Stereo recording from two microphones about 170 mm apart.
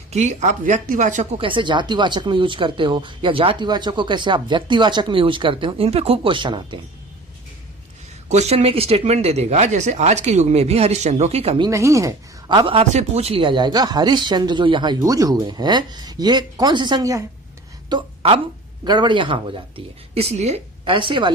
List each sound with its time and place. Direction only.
0.1 s speech: 45° right (ahead or behind)
8.3 s speech: 40° right (ahead or behind)
11.6 s speech: 15° right (ahead or behind)
17.8 s a sound: 30° right (ahead or behind)
18.9 s speech: 25° right (ahead or behind)